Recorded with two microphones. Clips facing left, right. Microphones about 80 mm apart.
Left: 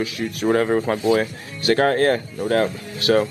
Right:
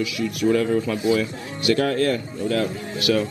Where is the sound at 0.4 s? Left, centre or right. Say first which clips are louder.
Left 1 dB; left.